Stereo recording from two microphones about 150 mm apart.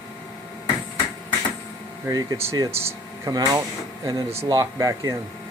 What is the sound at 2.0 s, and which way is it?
Speech, 20° right (ahead or behind).